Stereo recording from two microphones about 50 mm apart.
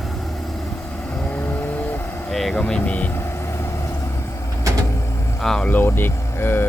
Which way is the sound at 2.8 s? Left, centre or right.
Left.